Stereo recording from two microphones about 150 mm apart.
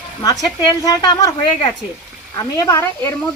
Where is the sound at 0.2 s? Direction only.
30° left (ahead or behind).